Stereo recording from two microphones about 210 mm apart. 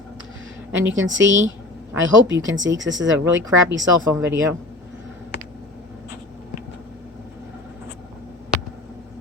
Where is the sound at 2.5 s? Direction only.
60° right (ahead or behind).